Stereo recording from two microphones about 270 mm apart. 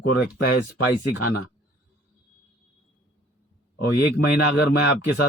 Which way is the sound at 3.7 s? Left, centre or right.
Left.